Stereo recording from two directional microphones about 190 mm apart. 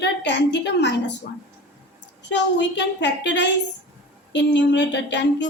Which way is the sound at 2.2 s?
65° left (ahead or behind).